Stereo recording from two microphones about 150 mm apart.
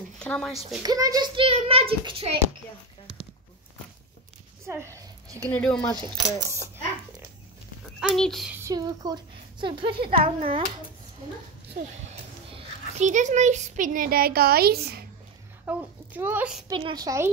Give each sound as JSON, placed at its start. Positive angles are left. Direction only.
{"t": 0.2, "sound": "speech", "side_deg": 5}
{"t": 0.8, "sound": "a child's voice", "side_deg": -25}
{"t": 4.6, "sound": "a sound", "side_deg": -20}
{"t": 5.5, "sound": "speech", "side_deg": 5}
{"t": 8.0, "sound": "a child's voice", "side_deg": 0}
{"t": 8.6, "sound": "a woman's voice", "side_deg": -25}
{"t": 12.4, "sound": "a sound", "side_deg": -35}
{"t": 13.0, "sound": "speech", "side_deg": -55}
{"t": 15.6, "sound": "a woman's voice", "side_deg": -10}
{"t": 16.7, "sound": "a woman's voice", "side_deg": -30}